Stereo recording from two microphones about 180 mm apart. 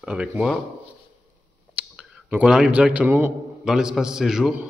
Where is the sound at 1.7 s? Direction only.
5° right (ahead or behind).